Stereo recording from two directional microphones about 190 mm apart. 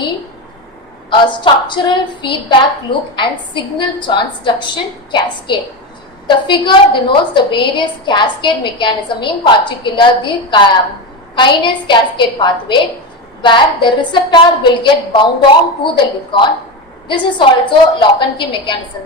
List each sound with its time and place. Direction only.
1.1 s a woman's voice: 25° left (ahead or behind)
17.1 s a woman's voice: 25° left (ahead or behind)